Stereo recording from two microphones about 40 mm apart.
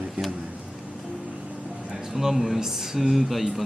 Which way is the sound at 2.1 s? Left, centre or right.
Centre.